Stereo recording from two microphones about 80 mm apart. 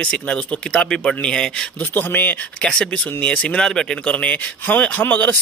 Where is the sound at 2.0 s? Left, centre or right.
Left.